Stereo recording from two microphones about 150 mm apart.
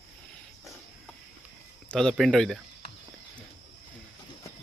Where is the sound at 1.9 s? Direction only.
5° left (ahead or behind).